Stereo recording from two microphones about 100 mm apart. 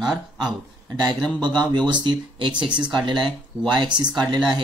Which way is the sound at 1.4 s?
50° right (ahead or behind).